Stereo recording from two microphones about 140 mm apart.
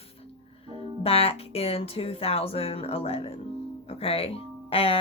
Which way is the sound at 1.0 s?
45° left (ahead or behind).